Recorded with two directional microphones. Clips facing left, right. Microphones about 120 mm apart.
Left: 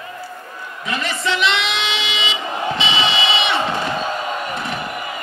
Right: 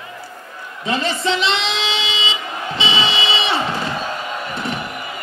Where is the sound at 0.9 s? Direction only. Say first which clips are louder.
Right 3 dB; 30° right (ahead or behind).